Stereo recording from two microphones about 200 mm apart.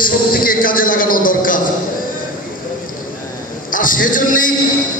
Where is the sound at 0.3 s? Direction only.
45° left (ahead or behind).